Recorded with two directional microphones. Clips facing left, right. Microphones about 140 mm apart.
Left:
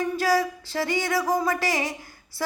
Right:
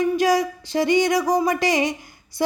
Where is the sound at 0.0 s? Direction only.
20° right (ahead or behind).